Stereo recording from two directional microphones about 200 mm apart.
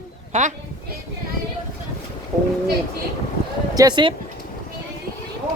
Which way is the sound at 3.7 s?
20° right (ahead or behind).